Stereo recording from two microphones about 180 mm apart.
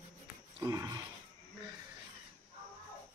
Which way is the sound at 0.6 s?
20° right (ahead or behind).